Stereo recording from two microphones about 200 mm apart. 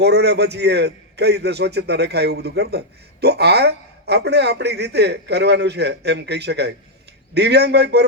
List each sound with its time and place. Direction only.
0.0 s a man's voice: 55° right (ahead or behind)